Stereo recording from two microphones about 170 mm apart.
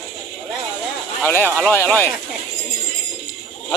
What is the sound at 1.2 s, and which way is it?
Speech, 10° left (ahead or behind).